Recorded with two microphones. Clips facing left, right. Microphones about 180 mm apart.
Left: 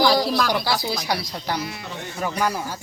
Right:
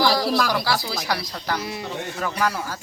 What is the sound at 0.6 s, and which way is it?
Speech, 20° left (ahead or behind).